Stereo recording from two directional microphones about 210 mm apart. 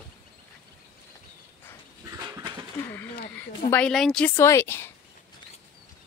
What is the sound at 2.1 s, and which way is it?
Dog, 15° right (ahead or behind).